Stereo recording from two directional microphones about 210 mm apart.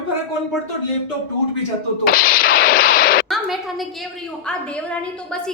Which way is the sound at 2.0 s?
45° left (ahead or behind).